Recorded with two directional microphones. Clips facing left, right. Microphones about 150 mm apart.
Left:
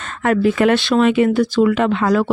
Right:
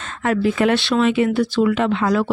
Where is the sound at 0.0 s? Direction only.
60° left (ahead or behind).